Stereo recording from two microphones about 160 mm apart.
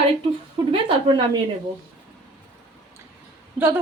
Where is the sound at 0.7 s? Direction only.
30° right (ahead or behind).